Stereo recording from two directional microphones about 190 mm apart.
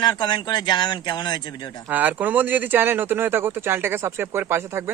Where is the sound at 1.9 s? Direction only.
10° right (ahead or behind).